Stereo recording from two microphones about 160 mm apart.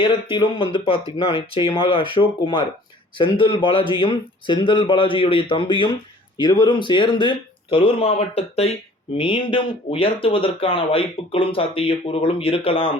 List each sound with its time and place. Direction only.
0.0 s speech: 30° left (ahead or behind)